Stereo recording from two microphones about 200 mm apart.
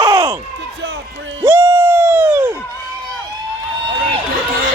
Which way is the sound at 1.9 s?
10° right (ahead or behind).